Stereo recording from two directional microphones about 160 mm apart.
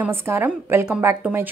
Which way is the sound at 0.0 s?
15° right (ahead or behind).